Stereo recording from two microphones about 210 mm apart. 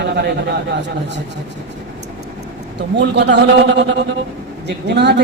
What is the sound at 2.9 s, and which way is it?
A man's voice, 55° right (ahead or behind).